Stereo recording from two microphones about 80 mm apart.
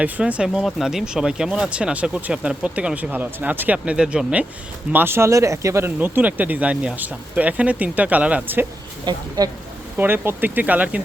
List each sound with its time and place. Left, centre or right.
0.0 s speech: centre
4.9 s speech: right
6.0 s speech: right
9.0 s speech: right
10.0 s speech: right